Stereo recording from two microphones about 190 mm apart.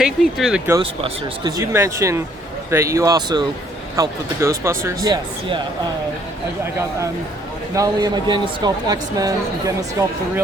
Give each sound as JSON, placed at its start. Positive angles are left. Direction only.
{"t": 0.0, "sound": "speech", "side_deg": -5}
{"t": 0.8, "sound": "speech", "side_deg": -25}
{"t": 7.8, "sound": "speech", "side_deg": -20}